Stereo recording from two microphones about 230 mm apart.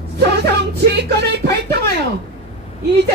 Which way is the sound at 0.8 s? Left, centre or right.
Right.